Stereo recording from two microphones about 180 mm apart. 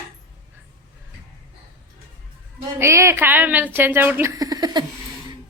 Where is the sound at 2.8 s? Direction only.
15° right (ahead or behind).